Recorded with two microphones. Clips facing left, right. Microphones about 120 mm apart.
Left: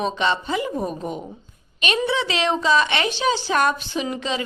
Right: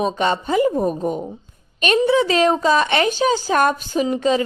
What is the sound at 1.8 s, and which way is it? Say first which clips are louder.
A woman's voice: right 6 dB; 45° right (ahead or behind).